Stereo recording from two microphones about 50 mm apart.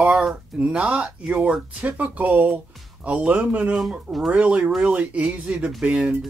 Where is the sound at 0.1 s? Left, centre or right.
Centre.